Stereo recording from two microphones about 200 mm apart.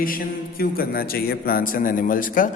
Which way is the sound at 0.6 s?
50° left (ahead or behind).